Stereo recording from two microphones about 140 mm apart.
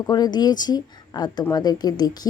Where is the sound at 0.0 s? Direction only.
30° left (ahead or behind).